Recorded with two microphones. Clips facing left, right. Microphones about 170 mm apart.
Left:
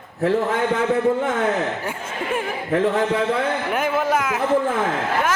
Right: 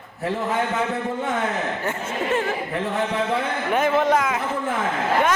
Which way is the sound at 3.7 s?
10° left (ahead or behind).